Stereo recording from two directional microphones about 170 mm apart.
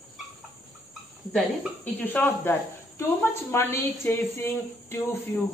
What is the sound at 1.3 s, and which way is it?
A woman's voice, 10° left (ahead or behind).